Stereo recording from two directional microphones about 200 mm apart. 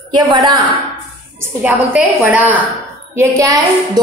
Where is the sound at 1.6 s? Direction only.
5° right (ahead or behind).